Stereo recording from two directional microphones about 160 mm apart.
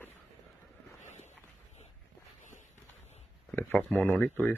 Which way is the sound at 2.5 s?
50° left (ahead or behind).